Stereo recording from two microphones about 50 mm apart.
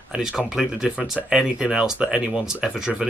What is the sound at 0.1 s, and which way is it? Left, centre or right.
Speech, centre.